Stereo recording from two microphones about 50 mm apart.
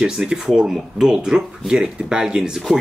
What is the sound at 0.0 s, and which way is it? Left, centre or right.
Speech, centre.